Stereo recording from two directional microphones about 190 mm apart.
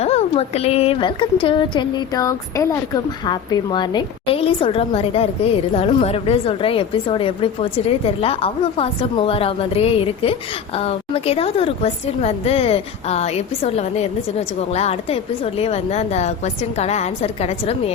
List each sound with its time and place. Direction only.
0.0 s a woman's voice: 35° left (ahead or behind)